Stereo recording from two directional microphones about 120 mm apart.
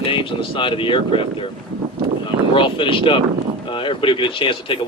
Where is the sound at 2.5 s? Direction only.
45° left (ahead or behind).